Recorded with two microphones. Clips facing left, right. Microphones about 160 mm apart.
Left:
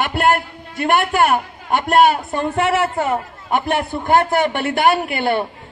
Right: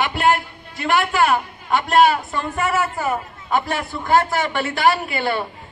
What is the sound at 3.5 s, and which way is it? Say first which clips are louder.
Speech: left 3 dB; 55° left (ahead or behind).